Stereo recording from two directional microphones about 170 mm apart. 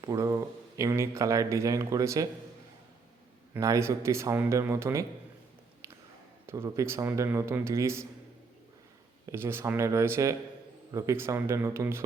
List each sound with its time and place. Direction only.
0.0 s speech: 20° right (ahead or behind)
3.5 s a man's voice: 20° right (ahead or behind)
5.8 s a sound: 15° right (ahead or behind)
6.4 s a man's voice: 15° right (ahead or behind)
9.3 s a man's voice: 15° right (ahead or behind)